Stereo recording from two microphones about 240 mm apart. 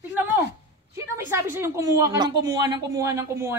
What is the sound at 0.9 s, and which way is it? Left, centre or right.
A woman's voice, centre.